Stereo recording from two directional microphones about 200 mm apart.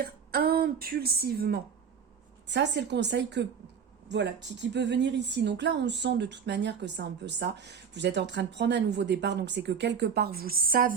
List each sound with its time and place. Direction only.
0.0 s a woman's voice: 50° right (ahead or behind)